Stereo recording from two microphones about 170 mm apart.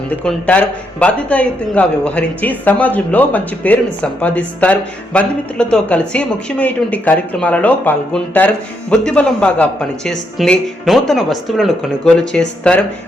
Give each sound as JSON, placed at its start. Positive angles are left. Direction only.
{"t": 0.3, "sound": "speech", "side_deg": 5}